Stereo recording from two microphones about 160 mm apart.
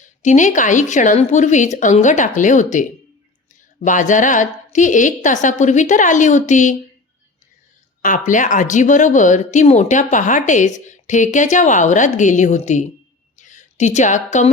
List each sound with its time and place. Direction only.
0.0 s speech: 50° left (ahead or behind)
8.0 s a woman's voice: 55° left (ahead or behind)